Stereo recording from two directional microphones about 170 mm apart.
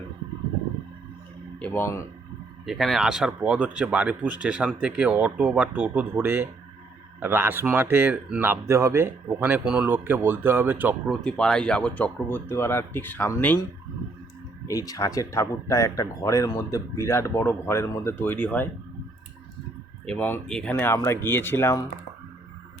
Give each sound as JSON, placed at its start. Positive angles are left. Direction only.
{"t": 1.5, "sound": "speech", "side_deg": 10}
{"t": 2.6, "sound": "speech", "side_deg": 0}
{"t": 11.1, "sound": "speech", "side_deg": 5}
{"t": 14.7, "sound": "speech", "side_deg": 20}
{"t": 20.1, "sound": "speech", "side_deg": 10}